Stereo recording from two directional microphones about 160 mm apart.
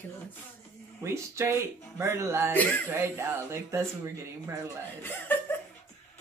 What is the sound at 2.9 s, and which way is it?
Speech, 15° right (ahead or behind).